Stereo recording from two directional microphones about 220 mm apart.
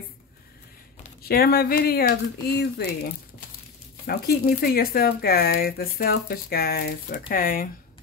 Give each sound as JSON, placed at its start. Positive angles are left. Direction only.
{"t": 1.0, "sound": "speech", "side_deg": 45}
{"t": 4.0, "sound": "speech", "side_deg": 45}